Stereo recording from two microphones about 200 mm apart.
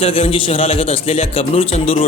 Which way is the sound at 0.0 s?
30° left (ahead or behind).